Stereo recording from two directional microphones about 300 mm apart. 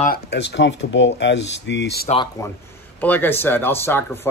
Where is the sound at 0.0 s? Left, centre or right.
Left.